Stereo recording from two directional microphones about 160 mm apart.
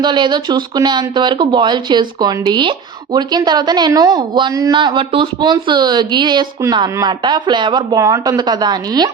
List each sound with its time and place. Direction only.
0.0 s speech: 30° right (ahead or behind)